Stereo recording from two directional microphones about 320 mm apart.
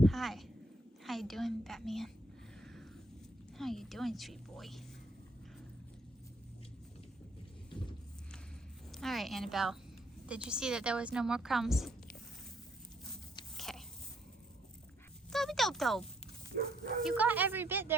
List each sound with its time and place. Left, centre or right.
0.0 s a sound: centre
3.6 s a woman's voice: centre
8.9 s a woman's voice: centre
13.6 s a sound: centre
15.3 s a child's voice: centre
16.6 s speech: right
17.1 s a woman's voice: centre